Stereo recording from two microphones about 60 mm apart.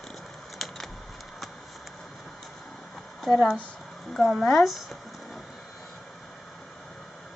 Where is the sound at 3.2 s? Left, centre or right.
Centre.